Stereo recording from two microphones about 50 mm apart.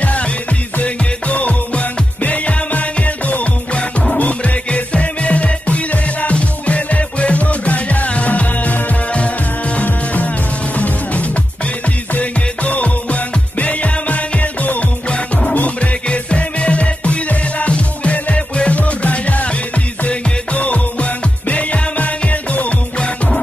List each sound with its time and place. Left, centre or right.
0.0 s music: left
12.1 s music: left